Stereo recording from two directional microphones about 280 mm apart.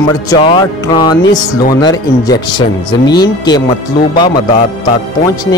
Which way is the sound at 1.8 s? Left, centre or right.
Centre.